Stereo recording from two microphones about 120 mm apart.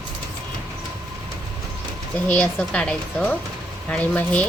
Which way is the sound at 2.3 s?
10° left (ahead or behind).